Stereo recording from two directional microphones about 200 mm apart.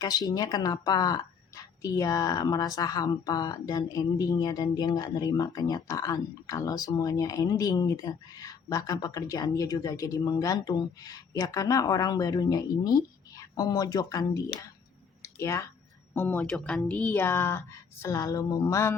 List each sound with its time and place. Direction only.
0.0 s a woman's voice: 20° left (ahead or behind)
15.2 s a sound: 15° left (ahead or behind)
16.1 s a woman's voice: 10° left (ahead or behind)